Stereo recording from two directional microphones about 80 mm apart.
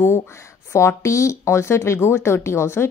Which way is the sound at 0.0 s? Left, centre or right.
Left.